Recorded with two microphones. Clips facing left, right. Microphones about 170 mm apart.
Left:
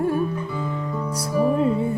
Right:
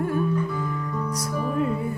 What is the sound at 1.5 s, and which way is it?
Music, 25° left (ahead or behind).